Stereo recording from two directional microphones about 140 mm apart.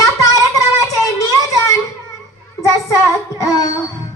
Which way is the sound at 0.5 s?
25° left (ahead or behind).